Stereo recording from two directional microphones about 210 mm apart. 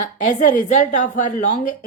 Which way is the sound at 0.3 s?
35° left (ahead or behind).